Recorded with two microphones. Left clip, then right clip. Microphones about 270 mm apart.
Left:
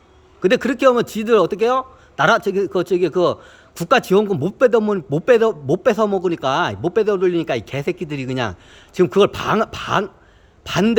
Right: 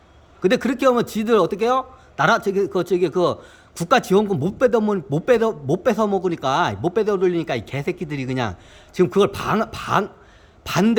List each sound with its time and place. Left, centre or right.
0.4 s a man's voice: centre